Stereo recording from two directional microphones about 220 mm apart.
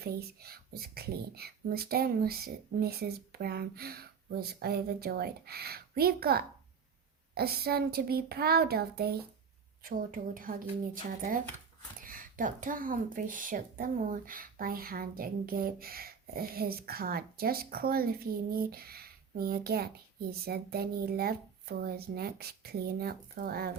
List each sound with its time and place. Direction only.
0.0 s a woman's voice: 45° right (ahead or behind)